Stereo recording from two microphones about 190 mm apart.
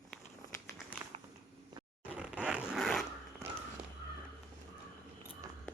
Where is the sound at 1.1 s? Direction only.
30° right (ahead or behind).